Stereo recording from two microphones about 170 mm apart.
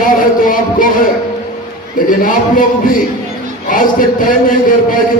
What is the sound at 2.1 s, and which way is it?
A man's voice, 50° left (ahead or behind).